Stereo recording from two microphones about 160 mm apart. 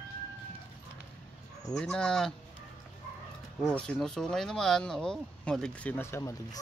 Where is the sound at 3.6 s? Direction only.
5° left (ahead or behind).